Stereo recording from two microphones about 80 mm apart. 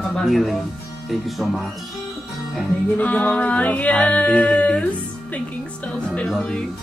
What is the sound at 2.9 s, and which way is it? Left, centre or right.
A capella, centre.